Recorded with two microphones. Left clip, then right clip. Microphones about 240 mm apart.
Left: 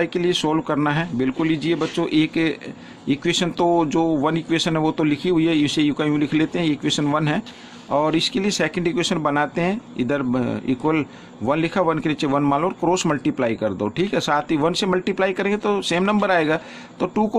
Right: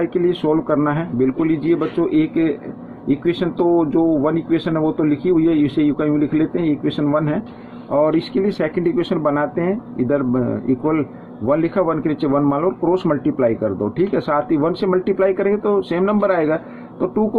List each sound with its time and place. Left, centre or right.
0.0 s speech: left